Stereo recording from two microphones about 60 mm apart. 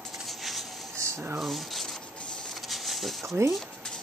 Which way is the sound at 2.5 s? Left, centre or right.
Centre.